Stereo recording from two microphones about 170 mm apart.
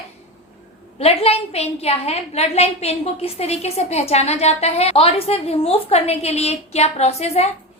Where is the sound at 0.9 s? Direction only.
35° left (ahead or behind).